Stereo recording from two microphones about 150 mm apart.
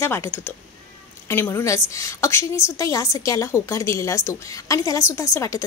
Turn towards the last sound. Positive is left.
turn(degrees=20)  # may be behind; listen again after turning